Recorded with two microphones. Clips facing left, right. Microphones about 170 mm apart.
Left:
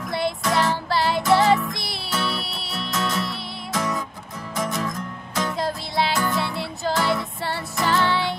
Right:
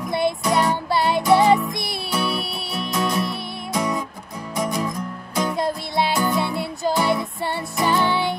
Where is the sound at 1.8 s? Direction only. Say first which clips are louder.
Right 3 dB; 55° right (ahead or behind).